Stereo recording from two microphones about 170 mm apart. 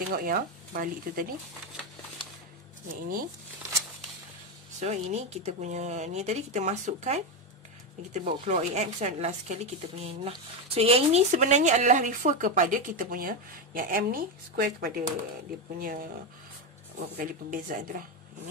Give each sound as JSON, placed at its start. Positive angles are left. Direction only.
{"t": 0.1, "sound": "speech", "side_deg": -60}
{"t": 4.7, "sound": "speech", "side_deg": -40}
{"t": 17.2, "sound": "speech", "side_deg": -50}